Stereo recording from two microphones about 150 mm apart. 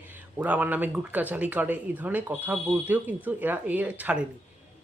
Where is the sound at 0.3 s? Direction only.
10° right (ahead or behind).